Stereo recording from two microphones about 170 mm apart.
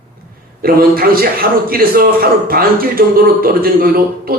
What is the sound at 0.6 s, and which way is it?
A man's voice, 60° right (ahead or behind).